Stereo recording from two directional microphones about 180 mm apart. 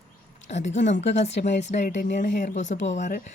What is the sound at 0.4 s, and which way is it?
Speech, 40° left (ahead or behind).